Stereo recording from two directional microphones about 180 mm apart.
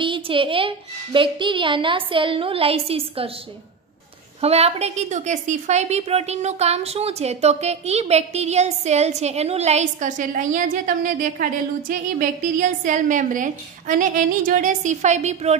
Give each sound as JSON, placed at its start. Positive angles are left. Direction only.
{"t": 0.0, "sound": "a woman's voice", "side_deg": -30}
{"t": 4.4, "sound": "a woman's voice", "side_deg": -35}